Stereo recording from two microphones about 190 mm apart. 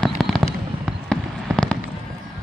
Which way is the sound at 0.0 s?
Centre (ahead or behind).